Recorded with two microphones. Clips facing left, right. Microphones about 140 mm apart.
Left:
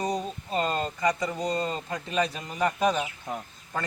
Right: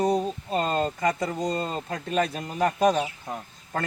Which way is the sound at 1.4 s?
5° left (ahead or behind).